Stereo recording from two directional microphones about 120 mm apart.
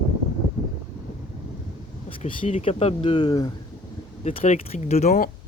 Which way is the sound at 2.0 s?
50° left (ahead or behind).